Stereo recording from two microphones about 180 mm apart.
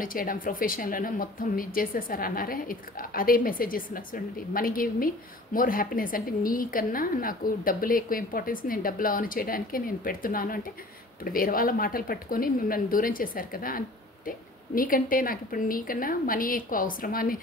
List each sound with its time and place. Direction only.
0.0 s speech: 50° left (ahead or behind)